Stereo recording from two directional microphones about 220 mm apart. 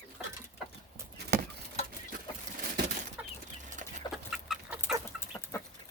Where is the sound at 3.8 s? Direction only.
35° right (ahead or behind).